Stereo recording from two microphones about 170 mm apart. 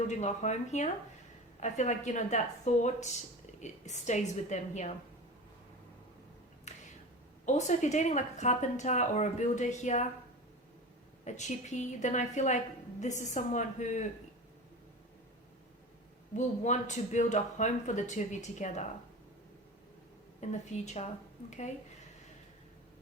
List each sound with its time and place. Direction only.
0.1 s a woman's voice: 45° left (ahead or behind)
7.4 s a woman's voice: 45° left (ahead or behind)
11.3 s a woman's voice: 45° left (ahead or behind)
16.3 s a woman's voice: 45° left (ahead or behind)
20.4 s a woman's voice: 40° left (ahead or behind)